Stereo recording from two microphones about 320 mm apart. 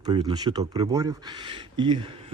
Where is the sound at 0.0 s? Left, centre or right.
Centre.